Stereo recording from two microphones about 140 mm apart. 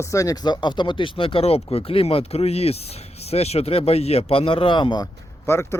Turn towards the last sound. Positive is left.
turn(degrees=20)  # may be behind; listen again after turning